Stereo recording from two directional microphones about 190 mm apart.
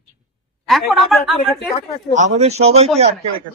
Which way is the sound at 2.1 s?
40° right (ahead or behind).